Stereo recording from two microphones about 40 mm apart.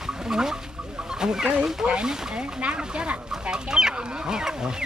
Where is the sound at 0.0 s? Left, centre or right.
Centre.